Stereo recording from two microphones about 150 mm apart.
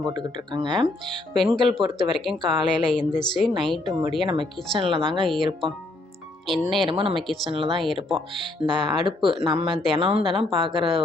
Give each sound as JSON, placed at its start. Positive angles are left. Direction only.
{"t": 0.0, "sound": "speech", "side_deg": -30}
{"t": 1.3, "sound": "speech", "side_deg": 0}
{"t": 4.3, "sound": "speech", "side_deg": -35}
{"t": 6.5, "sound": "speech", "side_deg": 0}
{"t": 6.8, "sound": "speech", "side_deg": -35}
{"t": 7.2, "sound": "speech", "side_deg": 0}
{"t": 7.5, "sound": "speech", "side_deg": -40}